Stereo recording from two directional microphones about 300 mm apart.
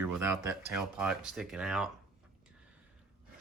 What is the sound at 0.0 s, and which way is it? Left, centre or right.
Speech, centre.